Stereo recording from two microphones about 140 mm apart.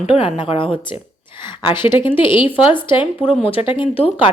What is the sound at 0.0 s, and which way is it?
A woman's voice, 40° left (ahead or behind).